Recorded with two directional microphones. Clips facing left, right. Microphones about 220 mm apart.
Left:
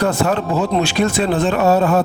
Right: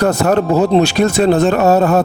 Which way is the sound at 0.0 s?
40° right (ahead or behind).